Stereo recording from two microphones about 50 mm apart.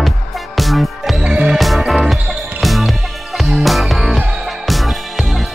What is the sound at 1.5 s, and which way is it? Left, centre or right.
Music, centre.